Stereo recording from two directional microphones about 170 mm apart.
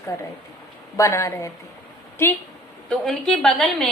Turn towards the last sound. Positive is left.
turn(degrees=0)  # may be behind; listen again after turning